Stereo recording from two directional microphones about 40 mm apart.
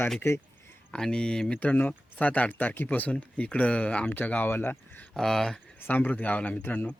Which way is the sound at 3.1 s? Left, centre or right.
Left.